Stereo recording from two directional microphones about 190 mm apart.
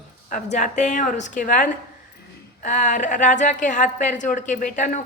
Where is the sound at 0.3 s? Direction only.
40° left (ahead or behind).